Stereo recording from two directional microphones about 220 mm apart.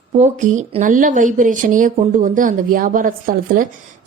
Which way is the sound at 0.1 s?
30° right (ahead or behind).